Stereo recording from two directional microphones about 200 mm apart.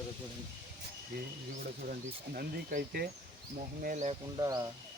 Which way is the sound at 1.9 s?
45° right (ahead or behind).